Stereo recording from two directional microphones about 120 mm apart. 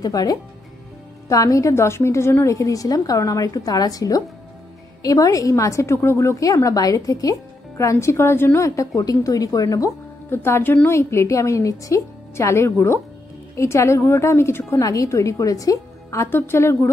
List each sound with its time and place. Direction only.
0.0 s a woman's voice: 30° left (ahead or behind)